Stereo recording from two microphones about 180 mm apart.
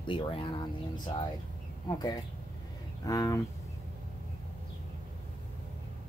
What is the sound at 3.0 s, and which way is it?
Speech, 20° left (ahead or behind).